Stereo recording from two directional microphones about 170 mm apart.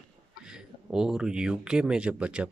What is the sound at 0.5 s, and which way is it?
A man's voice, 5° right (ahead or behind).